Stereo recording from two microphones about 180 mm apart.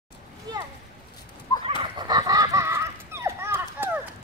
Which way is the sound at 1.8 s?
25° right (ahead or behind).